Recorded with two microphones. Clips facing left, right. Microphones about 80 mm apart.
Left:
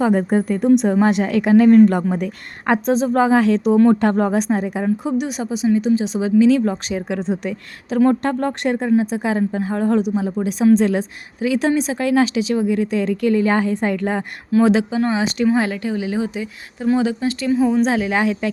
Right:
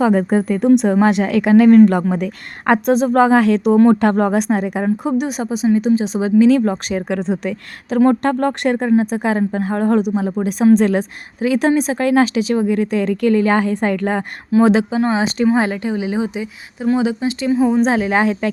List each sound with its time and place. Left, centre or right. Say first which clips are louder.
0.6 s speech: right 2 dB; right
2.6 s speech: right 3 dB; right
7.2 s a woman's voice: right 2 dB; right
7.9 s a woman's voice: right 2 dB; right
11.3 s a woman's voice: right 3 dB; right
14.6 s a woman's voice: right 2 dB; right
17.8 s speech: right 3 dB; right